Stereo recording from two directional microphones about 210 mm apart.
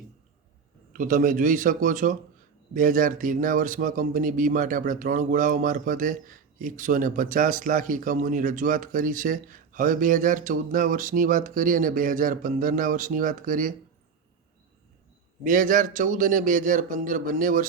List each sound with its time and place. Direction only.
0.9 s a man's voice: 40° right (ahead or behind)
15.4 s a man's voice: 40° right (ahead or behind)